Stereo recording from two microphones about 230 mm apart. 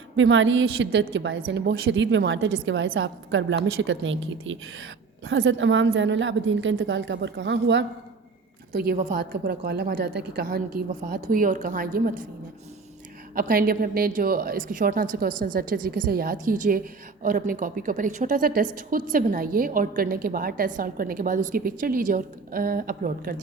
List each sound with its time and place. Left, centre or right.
0.2 s a woman's voice: right
8.7 s a woman's voice: right
13.3 s a woman's voice: right